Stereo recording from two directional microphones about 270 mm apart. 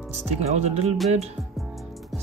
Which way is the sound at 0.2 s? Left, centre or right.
Right.